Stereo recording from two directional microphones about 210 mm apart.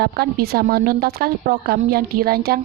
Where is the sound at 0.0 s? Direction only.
50° right (ahead or behind).